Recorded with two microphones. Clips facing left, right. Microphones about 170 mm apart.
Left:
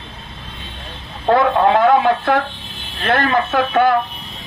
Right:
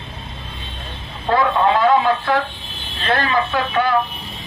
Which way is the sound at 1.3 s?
55° left (ahead or behind).